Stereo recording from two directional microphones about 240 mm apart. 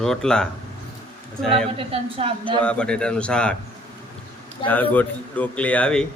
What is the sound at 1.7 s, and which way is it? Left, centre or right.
Speech, right.